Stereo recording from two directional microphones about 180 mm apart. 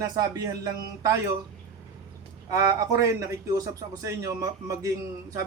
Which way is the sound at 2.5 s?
20° right (ahead or behind).